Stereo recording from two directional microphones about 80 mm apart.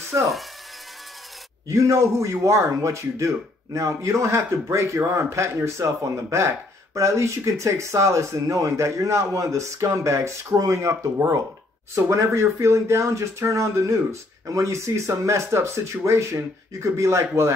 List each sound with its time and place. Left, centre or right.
0.1 s a man's voice: right
1.7 s a man's voice: right